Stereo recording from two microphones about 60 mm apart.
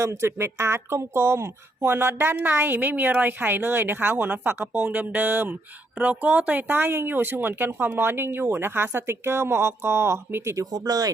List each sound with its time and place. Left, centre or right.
0.0 s speech: right
10.5 s speech: right